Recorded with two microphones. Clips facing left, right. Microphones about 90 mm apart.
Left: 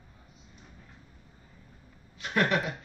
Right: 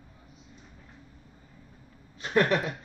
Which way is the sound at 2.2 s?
35° right (ahead or behind).